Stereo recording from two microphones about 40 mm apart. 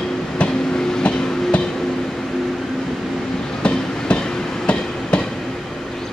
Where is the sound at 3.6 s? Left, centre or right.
Left.